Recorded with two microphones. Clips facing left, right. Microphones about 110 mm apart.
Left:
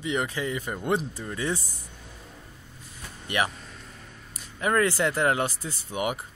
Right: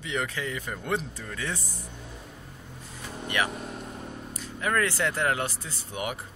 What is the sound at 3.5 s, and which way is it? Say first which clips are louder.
Vehicle: right 9 dB; 55° right (ahead or behind).